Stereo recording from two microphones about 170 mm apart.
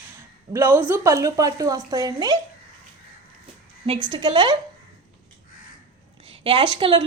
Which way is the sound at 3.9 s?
25° right (ahead or behind).